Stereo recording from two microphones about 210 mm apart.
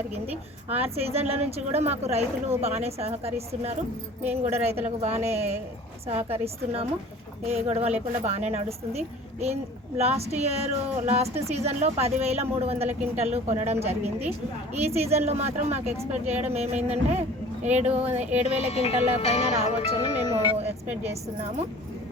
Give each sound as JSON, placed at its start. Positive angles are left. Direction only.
{"t": 0.7, "sound": "a woman's voice", "side_deg": -30}
{"t": 18.4, "sound": "speech", "side_deg": 30}
{"t": 19.6, "sound": "speech", "side_deg": 20}
{"t": 20.8, "sound": "a woman's voice", "side_deg": -10}